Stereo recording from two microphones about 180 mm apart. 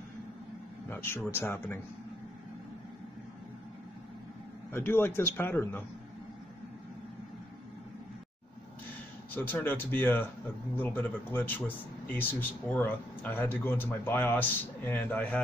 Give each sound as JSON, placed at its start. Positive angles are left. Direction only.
{"t": 0.8, "sound": "speech", "side_deg": 15}
{"t": 4.7, "sound": "speech", "side_deg": 15}
{"t": 9.3, "sound": "speech", "side_deg": 10}